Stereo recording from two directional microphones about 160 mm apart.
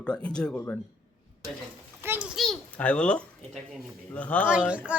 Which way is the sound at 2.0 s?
10° right (ahead or behind).